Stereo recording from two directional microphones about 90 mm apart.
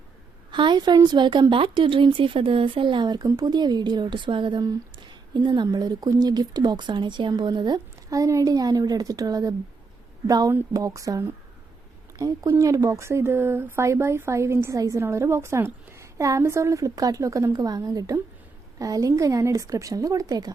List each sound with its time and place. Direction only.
0.5 s speech: 60° right (ahead or behind)
8.1 s speech: 40° right (ahead or behind)